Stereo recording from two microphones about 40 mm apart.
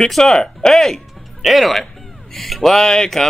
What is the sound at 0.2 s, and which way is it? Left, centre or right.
Speech, centre.